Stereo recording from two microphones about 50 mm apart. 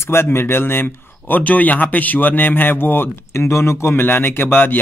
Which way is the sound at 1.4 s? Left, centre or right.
Left.